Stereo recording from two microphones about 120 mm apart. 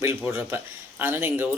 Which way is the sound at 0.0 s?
20° right (ahead or behind).